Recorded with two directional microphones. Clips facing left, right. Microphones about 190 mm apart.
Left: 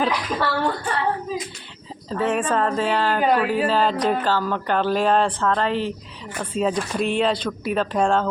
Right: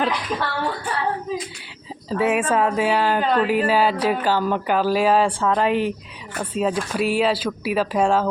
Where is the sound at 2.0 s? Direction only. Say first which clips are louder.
Right 2 dB; 10° right (ahead or behind).